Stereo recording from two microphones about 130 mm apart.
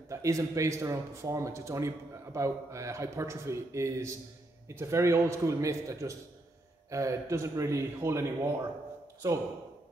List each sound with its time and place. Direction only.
0.1 s a man's voice: 25° right (ahead or behind)